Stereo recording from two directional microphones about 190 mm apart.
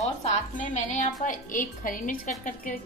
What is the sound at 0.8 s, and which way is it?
A woman's voice, 40° left (ahead or behind).